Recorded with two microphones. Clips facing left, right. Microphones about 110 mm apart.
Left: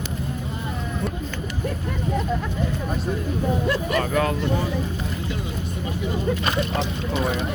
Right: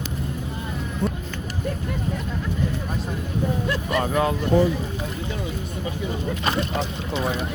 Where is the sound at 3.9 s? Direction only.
20° right (ahead or behind).